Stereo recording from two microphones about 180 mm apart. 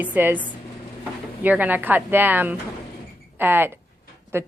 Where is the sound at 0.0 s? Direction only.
10° right (ahead or behind).